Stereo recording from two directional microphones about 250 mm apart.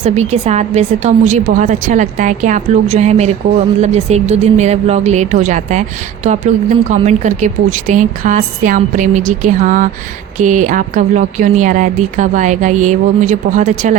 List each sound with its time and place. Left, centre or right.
0.0 s speech: right
6.8 s a woman's voice: right